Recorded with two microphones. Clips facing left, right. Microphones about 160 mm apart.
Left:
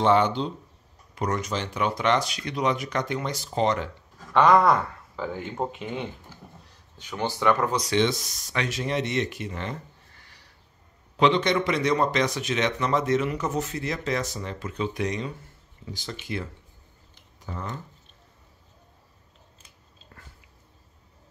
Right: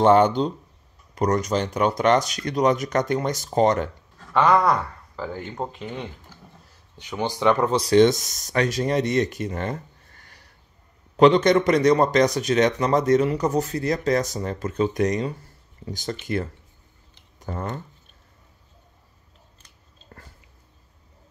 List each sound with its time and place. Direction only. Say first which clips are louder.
0.0 s speech: right 5 dB; 45° right (ahead or behind)
4.3 s speech: even; centre (ahead or behind)
7.0 s speech: right 3 dB; 15° right (ahead or behind)
7.8 s a man's voice: right 8 dB; 45° right (ahead or behind)
17.5 s speech: right 5 dB; 50° right (ahead or behind)
20.1 s biting: right 5 dB; 40° right (ahead or behind)